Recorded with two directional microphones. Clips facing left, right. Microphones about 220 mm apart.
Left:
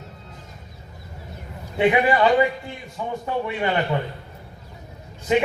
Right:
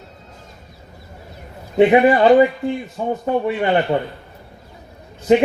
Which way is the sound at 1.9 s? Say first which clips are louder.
Right 5 dB; 40° right (ahead or behind).